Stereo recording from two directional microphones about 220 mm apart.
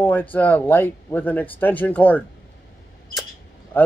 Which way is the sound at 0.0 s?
5° left (ahead or behind).